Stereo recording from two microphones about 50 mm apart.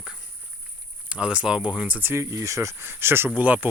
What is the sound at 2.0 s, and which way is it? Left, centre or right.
Speech, right.